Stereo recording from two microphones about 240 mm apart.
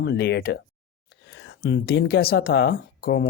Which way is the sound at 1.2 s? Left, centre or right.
Left.